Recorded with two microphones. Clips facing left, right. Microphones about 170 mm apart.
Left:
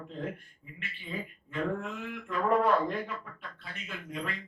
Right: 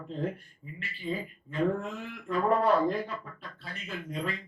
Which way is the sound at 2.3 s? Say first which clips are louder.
Right 1 dB; 35° right (ahead or behind).